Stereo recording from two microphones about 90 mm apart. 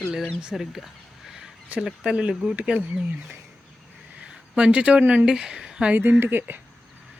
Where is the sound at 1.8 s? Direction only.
10° right (ahead or behind).